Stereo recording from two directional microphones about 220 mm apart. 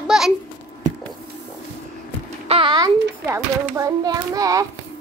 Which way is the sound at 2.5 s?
25° right (ahead or behind).